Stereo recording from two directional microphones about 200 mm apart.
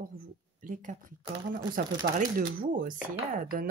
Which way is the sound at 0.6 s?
40° right (ahead or behind).